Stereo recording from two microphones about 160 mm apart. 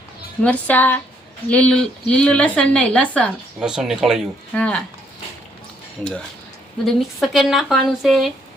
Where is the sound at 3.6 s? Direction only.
5° right (ahead or behind).